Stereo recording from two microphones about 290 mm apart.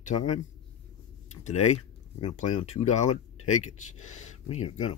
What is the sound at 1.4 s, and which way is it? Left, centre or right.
Speech, left.